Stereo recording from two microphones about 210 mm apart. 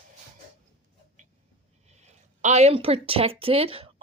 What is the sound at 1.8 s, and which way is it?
Speech, 30° right (ahead or behind).